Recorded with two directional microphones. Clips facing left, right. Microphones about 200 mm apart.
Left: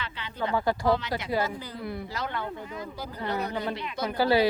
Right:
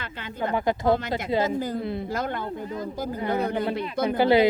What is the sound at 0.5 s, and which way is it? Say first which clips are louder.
Speech: right 2 dB; 20° right (ahead or behind).